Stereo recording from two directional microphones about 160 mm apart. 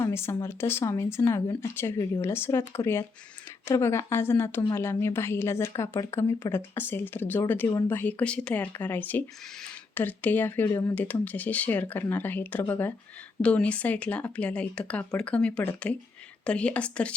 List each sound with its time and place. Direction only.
0.0 s a woman's voice: 15° left (ahead or behind)